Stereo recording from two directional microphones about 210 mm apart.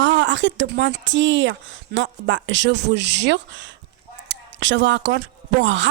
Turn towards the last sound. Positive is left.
turn(degrees=-60)  # may be behind; listen again after turning